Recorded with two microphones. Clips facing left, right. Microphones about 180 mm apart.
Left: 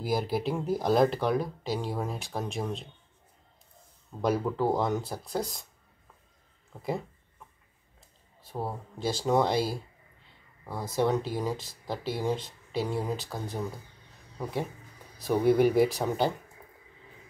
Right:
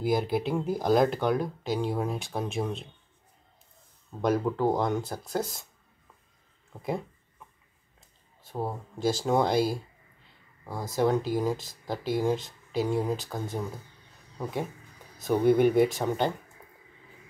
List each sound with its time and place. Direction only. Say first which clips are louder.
0.0 s speech: right 2 dB; centre (ahead or behind)
4.2 s speech: right 2 dB; centre (ahead or behind)
8.5 s speech: right 2 dB; centre (ahead or behind)